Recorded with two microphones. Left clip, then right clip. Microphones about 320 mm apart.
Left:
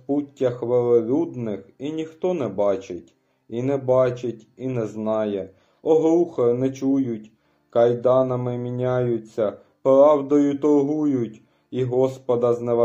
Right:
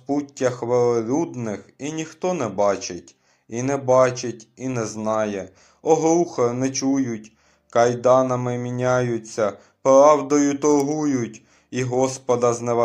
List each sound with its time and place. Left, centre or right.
0.4 s speech: centre